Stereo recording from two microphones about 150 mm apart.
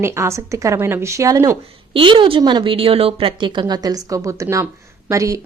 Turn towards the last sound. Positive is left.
turn(degrees=-20)  # may be behind; listen again after turning